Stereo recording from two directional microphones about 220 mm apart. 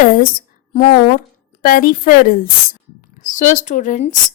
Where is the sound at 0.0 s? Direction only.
40° left (ahead or behind).